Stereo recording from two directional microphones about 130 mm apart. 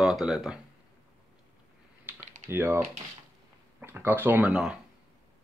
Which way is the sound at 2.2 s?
65° right (ahead or behind).